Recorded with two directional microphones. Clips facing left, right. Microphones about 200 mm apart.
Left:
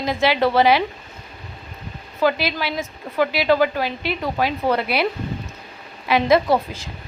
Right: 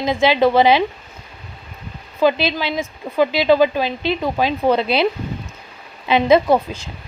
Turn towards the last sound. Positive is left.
turn(degrees=-15)  # may be behind; listen again after turning